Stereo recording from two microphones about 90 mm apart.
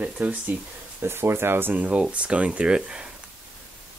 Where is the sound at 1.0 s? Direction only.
25° right (ahead or behind); by 3.1 s 10° right (ahead or behind).